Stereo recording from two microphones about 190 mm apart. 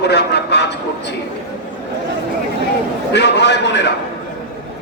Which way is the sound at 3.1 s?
60° left (ahead or behind).